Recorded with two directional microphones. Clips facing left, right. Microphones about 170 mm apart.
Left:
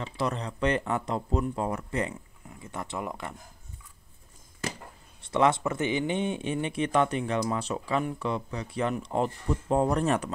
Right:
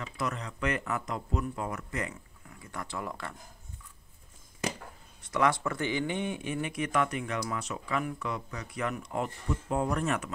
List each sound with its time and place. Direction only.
0.0 s speech: 30° left (ahead or behind)
5.2 s speech: 25° left (ahead or behind)